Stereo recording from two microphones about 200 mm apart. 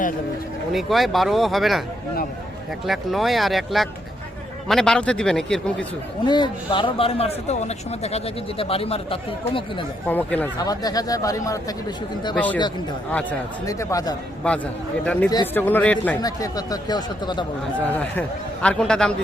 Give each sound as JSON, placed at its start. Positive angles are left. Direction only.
{"t": 0.7, "sound": "speech", "side_deg": 0}
{"t": 2.8, "sound": "speech", "side_deg": 0}
{"t": 6.2, "sound": "speech", "side_deg": 20}
{"t": 10.1, "sound": "speech", "side_deg": 10}
{"t": 13.7, "sound": "speech", "side_deg": 15}
{"t": 15.0, "sound": "speech", "side_deg": 5}
{"t": 15.3, "sound": "speech", "side_deg": 20}
{"t": 15.6, "sound": "speech", "side_deg": 10}
{"t": 16.2, "sound": "speech", "side_deg": 20}
{"t": 17.7, "sound": "speech", "side_deg": 5}